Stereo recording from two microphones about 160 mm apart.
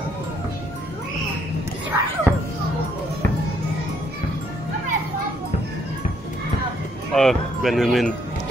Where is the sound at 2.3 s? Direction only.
15° right (ahead or behind).